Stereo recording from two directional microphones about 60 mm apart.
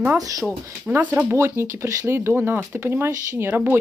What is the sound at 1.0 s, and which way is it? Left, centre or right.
Speech, right.